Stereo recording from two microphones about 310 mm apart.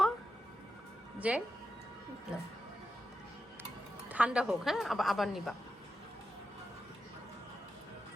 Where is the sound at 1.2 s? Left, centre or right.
Centre.